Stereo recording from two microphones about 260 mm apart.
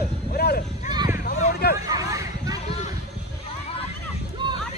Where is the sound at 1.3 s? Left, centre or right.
Left.